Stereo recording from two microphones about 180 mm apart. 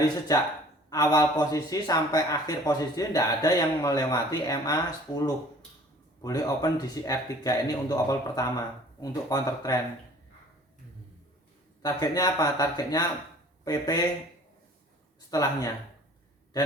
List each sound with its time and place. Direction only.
0.3 s speech: 20° left (ahead or behind)
11.8 s speech: 20° left (ahead or behind)
15.3 s speech: 20° left (ahead or behind)